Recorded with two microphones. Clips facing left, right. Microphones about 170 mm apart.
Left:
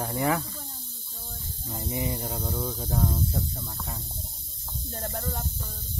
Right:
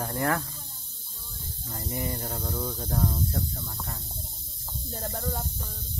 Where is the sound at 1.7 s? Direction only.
10° left (ahead or behind).